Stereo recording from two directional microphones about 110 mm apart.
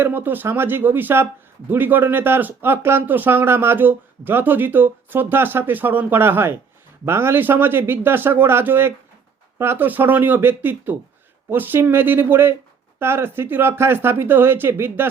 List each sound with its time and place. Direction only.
0.0 s speech: 20° right (ahead or behind)